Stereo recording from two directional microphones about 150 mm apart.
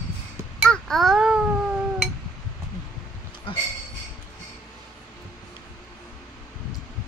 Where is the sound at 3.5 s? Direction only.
35° left (ahead or behind).